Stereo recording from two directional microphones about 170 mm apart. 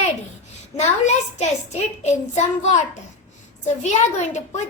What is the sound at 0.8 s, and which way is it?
A child's voice, 40° left (ahead or behind).